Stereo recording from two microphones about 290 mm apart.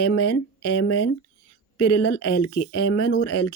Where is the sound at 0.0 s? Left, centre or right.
Left.